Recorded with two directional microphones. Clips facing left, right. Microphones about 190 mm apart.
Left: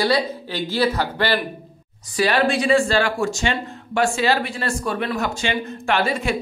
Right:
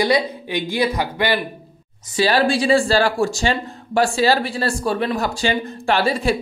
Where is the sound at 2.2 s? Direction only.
30° right (ahead or behind).